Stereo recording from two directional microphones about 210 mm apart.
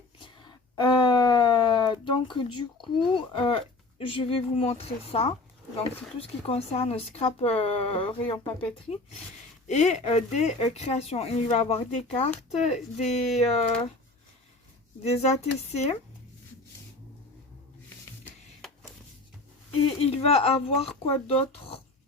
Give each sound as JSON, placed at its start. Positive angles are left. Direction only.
{"t": 0.2, "sound": "a sound", "side_deg": 20}
{"t": 3.1, "sound": "a woman's voice", "side_deg": 25}
{"t": 15.0, "sound": "a woman's voice", "side_deg": 30}
{"t": 20.0, "sound": "speech", "side_deg": 30}